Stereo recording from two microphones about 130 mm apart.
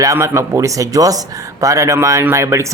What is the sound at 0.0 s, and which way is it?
A man's voice, 25° right (ahead or behind).